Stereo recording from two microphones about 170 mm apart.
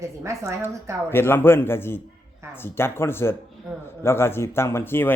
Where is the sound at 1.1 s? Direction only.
15° left (ahead or behind).